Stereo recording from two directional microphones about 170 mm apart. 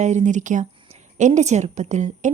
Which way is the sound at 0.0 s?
45° right (ahead or behind).